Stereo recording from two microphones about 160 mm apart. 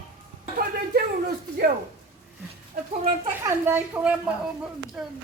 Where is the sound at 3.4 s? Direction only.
10° right (ahead or behind).